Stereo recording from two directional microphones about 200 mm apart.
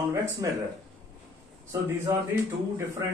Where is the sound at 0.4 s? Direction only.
20° right (ahead or behind).